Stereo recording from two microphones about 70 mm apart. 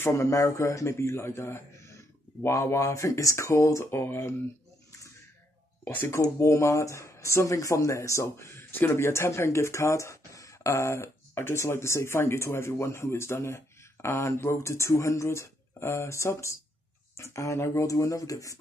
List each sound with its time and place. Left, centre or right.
0.0 s speech: left
6.2 s speech: left